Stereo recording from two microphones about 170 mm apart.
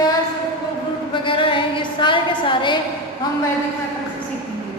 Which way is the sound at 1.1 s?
30° left (ahead or behind).